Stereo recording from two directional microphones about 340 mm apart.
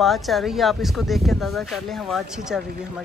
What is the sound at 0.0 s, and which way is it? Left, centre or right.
Speech, centre.